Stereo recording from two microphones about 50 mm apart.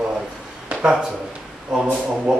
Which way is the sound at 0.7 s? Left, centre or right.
Centre.